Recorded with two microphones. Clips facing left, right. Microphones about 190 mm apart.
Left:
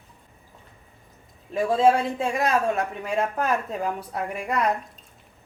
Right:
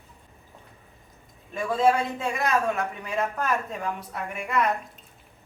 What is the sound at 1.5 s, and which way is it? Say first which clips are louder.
A man's voice: left 3 dB; 30° left (ahead or behind).